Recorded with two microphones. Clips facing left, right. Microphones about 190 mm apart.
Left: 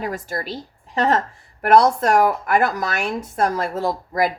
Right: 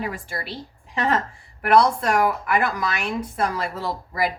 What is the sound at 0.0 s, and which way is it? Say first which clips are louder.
A woman's voice: left 4 dB; 40° left (ahead or behind).